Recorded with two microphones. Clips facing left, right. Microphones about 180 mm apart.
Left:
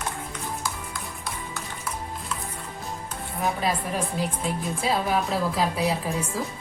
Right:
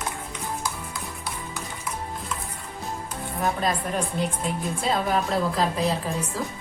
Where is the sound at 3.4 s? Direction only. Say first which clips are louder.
Right 1 dB; centre (ahead or behind).